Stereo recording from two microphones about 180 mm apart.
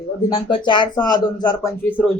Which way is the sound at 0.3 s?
25° left (ahead or behind).